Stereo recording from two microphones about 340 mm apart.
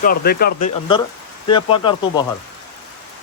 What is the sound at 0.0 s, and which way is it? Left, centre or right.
Speech, left.